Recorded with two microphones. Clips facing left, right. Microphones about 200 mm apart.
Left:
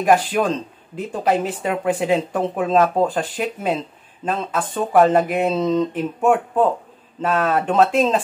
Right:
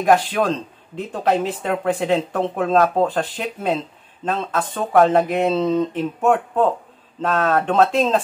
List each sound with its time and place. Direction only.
0.0 s speech: 5° left (ahead or behind)